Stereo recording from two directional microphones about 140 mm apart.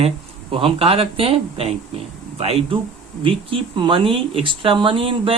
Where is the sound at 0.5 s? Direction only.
40° right (ahead or behind).